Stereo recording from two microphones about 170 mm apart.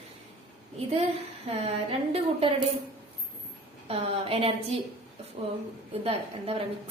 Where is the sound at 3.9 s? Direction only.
35° right (ahead or behind).